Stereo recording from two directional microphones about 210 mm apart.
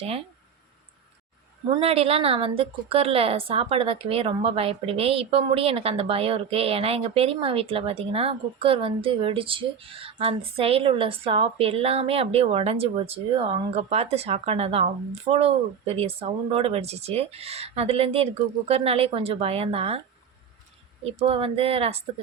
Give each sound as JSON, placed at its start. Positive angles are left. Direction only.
{"t": 1.7, "sound": "a woman's voice", "side_deg": -30}
{"t": 21.0, "sound": "a woman's voice", "side_deg": -30}